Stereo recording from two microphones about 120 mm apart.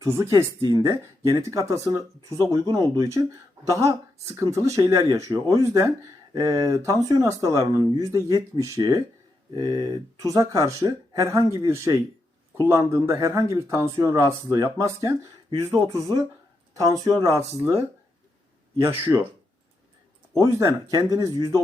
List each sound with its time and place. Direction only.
0.0 s speech: 25° right (ahead or behind)
20.4 s speech: 25° right (ahead or behind)